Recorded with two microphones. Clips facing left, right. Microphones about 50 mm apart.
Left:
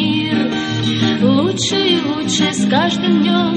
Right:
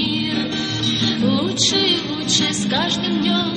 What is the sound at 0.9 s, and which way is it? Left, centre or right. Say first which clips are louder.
Music: left 6 dB; left.